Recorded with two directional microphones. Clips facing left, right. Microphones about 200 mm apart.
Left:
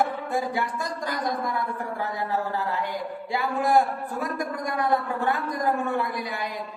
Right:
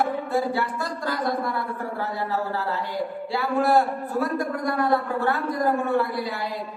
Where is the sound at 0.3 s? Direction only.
15° left (ahead or behind).